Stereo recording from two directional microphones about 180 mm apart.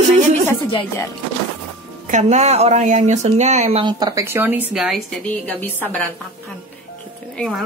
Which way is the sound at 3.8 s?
25° right (ahead or behind).